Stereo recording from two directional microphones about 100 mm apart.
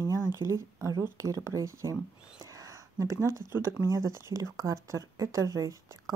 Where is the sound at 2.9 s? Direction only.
30° right (ahead or behind).